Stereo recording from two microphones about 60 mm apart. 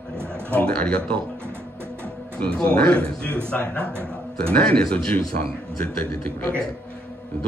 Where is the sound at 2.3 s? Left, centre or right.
Centre.